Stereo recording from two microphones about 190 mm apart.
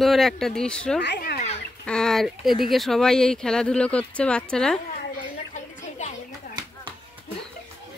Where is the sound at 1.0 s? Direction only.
60° left (ahead or behind).